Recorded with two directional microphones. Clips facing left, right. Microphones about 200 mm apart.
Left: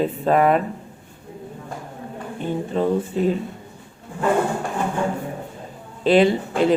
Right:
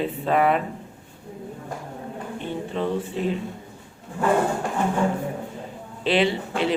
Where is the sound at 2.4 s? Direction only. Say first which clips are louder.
Left 6 dB; 40° left (ahead or behind).